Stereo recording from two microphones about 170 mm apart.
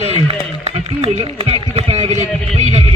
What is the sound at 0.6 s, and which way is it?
A man's voice, 40° right (ahead or behind).